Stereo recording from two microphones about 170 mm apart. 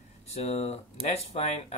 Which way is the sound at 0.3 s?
40° left (ahead or behind).